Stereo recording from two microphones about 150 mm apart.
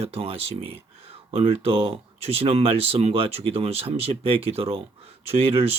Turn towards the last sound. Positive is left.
turn(degrees=-40)  # may be behind; listen again after turning